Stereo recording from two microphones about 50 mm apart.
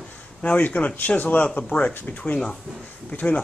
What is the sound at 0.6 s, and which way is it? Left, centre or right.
Speech, left.